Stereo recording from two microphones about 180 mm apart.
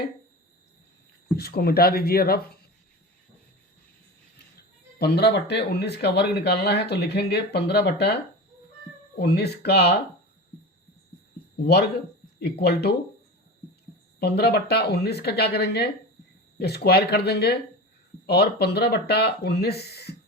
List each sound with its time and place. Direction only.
1.4 s speech: 60° left (ahead or behind)
4.9 s speech: 65° left (ahead or behind)
11.6 s speech: 65° left (ahead or behind)
14.2 s speech: 65° left (ahead or behind)